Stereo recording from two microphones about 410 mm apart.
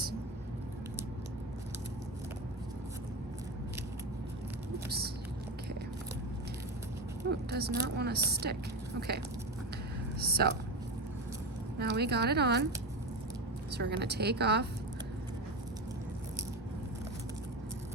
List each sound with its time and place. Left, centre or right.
7.5 s speech: right
10.2 s a sound: right
11.8 s speech: right
13.7 s speech: right